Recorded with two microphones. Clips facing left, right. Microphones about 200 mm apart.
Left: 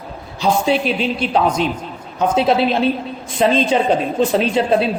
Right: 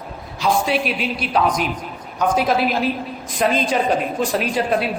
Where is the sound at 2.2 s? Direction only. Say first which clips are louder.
Left 3 dB; 25° left (ahead or behind).